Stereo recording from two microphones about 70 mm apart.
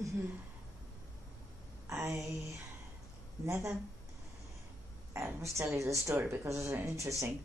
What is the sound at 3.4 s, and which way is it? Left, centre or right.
Speech, right.